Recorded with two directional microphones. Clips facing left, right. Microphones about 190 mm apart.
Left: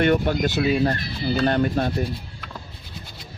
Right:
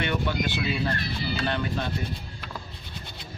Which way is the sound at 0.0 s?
45° left (ahead or behind).